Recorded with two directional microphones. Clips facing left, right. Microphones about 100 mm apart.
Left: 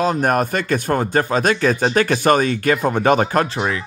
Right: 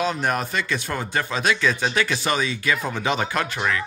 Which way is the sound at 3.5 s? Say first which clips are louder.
Left 3 dB; 25° left (ahead or behind).